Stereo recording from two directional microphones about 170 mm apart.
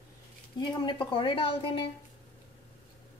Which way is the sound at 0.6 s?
30° left (ahead or behind).